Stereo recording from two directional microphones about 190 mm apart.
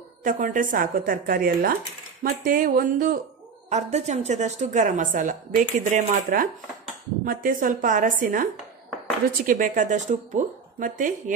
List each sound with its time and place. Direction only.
0.2 s speech: 45° right (ahead or behind)
3.7 s a woman's voice: 35° right (ahead or behind)
9.5 s speech: 45° right (ahead or behind)